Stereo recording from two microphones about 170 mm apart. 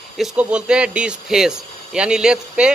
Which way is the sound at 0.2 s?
5° right (ahead or behind).